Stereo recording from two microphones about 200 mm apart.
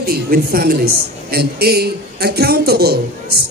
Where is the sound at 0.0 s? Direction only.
50° right (ahead or behind).